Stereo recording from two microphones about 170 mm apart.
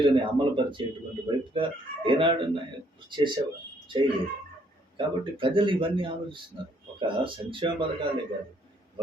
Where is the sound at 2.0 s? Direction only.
30° right (ahead or behind).